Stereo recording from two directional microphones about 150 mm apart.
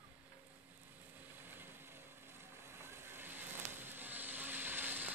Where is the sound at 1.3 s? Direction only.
15° right (ahead or behind).